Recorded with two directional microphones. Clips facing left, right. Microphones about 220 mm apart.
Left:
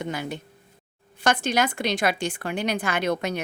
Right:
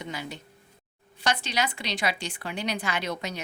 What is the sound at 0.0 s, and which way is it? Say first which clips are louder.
A woman's voice: left 6 dB; 55° left (ahead or behind).